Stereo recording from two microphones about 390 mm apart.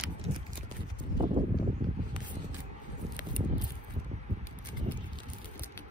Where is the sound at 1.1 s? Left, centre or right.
Centre.